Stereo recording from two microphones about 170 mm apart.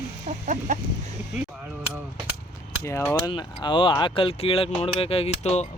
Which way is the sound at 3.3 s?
30° left (ahead or behind).